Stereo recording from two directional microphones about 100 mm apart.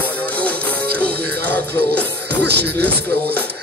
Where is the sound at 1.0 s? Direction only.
15° left (ahead or behind).